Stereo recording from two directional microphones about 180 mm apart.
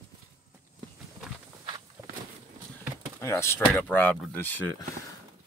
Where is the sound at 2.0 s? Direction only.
15° right (ahead or behind).